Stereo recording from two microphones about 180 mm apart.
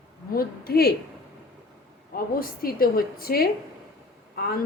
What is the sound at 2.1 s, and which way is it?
Speech, 55° left (ahead or behind).